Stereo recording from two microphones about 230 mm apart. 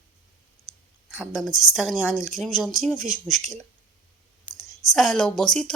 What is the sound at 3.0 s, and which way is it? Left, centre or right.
Speech, right.